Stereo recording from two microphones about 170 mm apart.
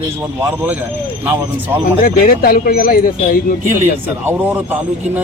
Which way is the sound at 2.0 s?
60° left (ahead or behind).